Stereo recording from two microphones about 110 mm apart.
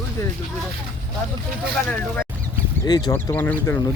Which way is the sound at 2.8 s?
40° left (ahead or behind).